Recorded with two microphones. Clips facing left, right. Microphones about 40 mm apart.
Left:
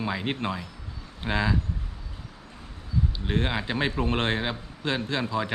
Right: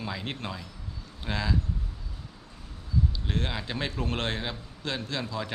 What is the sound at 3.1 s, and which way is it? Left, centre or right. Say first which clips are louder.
Speech: left 5 dB; left.